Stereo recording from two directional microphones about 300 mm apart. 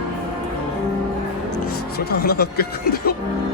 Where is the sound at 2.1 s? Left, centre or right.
Left.